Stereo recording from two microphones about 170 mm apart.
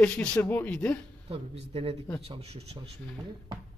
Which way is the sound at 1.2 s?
35° right (ahead or behind).